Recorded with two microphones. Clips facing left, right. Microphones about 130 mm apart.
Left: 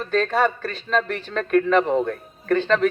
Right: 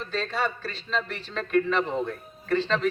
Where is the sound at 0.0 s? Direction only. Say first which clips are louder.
Left 8 dB; 55° left (ahead or behind).